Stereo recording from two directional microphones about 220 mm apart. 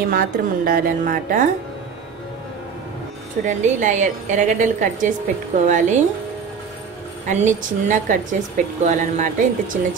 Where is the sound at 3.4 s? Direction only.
35° right (ahead or behind).